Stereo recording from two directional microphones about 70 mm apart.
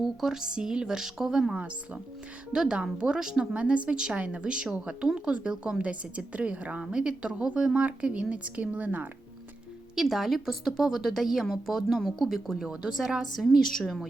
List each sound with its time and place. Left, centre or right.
0.0 s speech: centre; by 9.0 s right
9.9 s a woman's voice: centre